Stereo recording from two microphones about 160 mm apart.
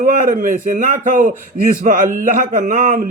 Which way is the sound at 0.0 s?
55° right (ahead or behind).